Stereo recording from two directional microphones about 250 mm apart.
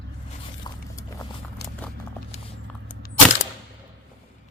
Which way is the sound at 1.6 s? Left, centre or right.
Left.